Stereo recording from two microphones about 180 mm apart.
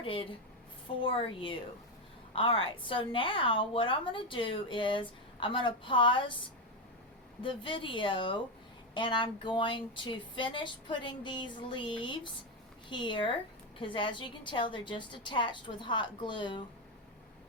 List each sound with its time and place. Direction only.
0.0 s a woman's voice: 30° left (ahead or behind)
7.4 s a woman's voice: 30° left (ahead or behind)